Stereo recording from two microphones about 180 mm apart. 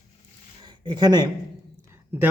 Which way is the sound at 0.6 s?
25° right (ahead or behind).